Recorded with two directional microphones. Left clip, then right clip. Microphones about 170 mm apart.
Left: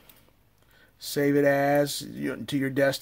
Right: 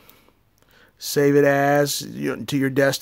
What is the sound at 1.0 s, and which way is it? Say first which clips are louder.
Speech: right 6 dB; 35° right (ahead or behind).